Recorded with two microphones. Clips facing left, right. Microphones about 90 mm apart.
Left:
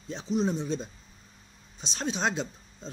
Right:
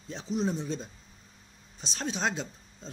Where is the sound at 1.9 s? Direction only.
10° left (ahead or behind).